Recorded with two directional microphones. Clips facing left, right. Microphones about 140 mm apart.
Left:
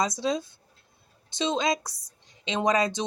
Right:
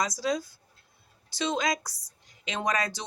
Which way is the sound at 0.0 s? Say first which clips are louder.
Left 2 dB; 25° left (ahead or behind).